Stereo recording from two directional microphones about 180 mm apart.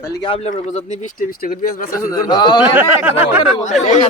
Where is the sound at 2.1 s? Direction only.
20° left (ahead or behind).